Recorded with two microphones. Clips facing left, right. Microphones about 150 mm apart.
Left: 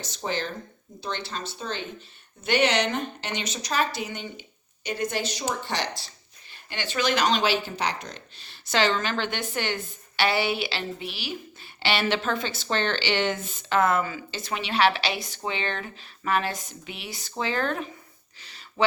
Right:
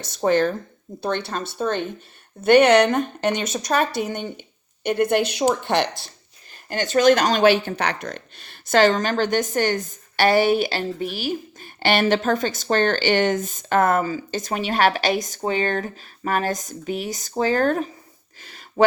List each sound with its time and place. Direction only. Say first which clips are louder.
0.2 s a woman's voice: right 12 dB; 55° right (ahead or behind)
6.7 s speech: right 10 dB; 45° right (ahead or behind)
18.4 s a sound: right 7 dB; 45° right (ahead or behind)